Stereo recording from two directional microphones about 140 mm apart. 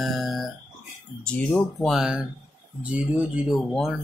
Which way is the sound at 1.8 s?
5° right (ahead or behind).